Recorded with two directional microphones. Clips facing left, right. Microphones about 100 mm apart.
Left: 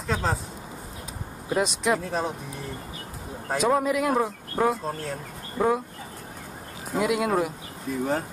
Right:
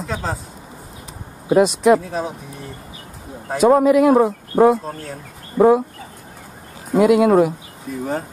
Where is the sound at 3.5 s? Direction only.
Centre (ahead or behind).